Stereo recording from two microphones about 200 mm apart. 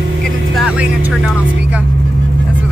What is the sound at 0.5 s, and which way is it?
Music, 5° right (ahead or behind).